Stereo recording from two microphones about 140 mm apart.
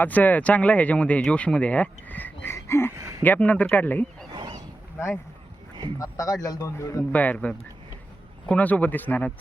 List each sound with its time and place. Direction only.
0.0 s speech: 10° left (ahead or behind)
2.9 s speech: 20° right (ahead or behind)
3.2 s speech: 10° left (ahead or behind)
4.3 s a sound: 35° right (ahead or behind)
6.0 s speech: 25° left (ahead or behind)
7.1 s speech: 10° left (ahead or behind)